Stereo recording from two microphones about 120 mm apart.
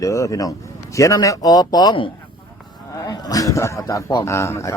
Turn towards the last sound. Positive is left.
turn(degrees=25)  # may be behind; listen again after turning